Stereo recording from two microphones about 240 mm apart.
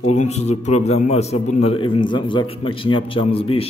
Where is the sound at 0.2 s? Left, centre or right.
Left.